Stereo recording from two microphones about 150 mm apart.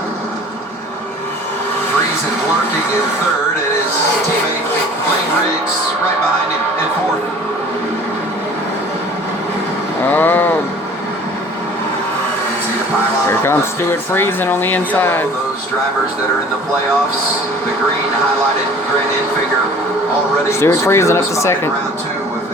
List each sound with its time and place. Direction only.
10.1 s vehicle: 10° left (ahead or behind)
13.4 s speech: 15° left (ahead or behind)
20.5 s speech: 20° left (ahead or behind)